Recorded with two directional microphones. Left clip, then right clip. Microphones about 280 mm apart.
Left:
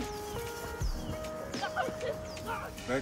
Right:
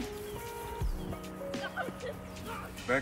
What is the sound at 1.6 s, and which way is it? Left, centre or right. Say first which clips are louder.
Music: left 6 dB; left.